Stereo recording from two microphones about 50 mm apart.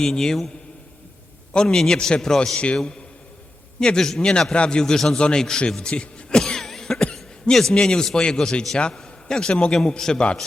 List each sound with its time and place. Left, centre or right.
0.0 s a man's voice: centre
1.6 s a man's voice: centre
3.8 s a man's voice: centre
6.4 s cough: centre
7.7 s a man's voice: centre